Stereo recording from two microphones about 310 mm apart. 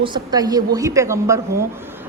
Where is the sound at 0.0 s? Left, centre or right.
Centre.